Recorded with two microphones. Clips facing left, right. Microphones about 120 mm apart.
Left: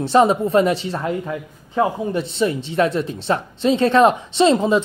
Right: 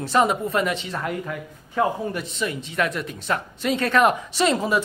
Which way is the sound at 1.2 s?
20° left (ahead or behind).